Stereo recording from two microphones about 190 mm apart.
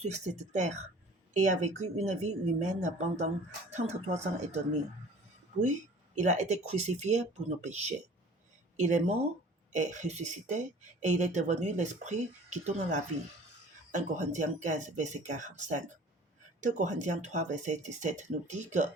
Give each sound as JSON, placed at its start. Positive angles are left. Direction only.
{"t": 0.0, "sound": "speech", "side_deg": -35}
{"t": 6.1, "sound": "speech", "side_deg": -40}